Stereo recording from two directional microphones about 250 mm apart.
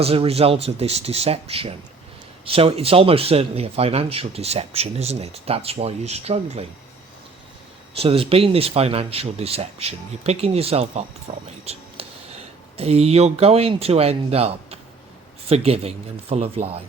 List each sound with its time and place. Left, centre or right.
0.0 s speech: right
7.9 s speech: right